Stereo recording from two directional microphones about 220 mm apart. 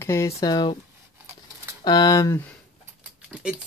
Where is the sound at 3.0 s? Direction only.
5° right (ahead or behind).